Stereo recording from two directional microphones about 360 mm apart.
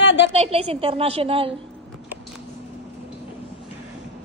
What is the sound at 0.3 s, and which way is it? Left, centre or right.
A woman's voice, centre.